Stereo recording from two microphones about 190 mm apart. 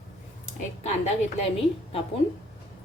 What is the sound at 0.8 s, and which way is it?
Speech, 35° left (ahead or behind).